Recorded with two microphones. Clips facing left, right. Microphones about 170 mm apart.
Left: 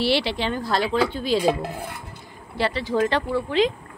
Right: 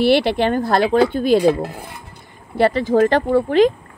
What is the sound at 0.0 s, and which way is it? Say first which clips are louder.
Speech: right 8 dB; 55° right (ahead or behind).